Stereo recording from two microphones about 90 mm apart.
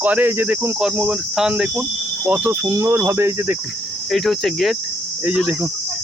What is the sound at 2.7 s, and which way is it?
Cricket, 30° right (ahead or behind).